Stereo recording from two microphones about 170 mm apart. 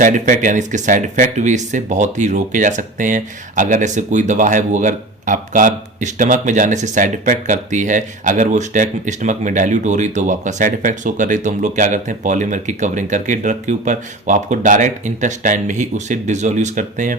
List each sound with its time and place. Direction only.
0.0 s speech: 50° right (ahead or behind)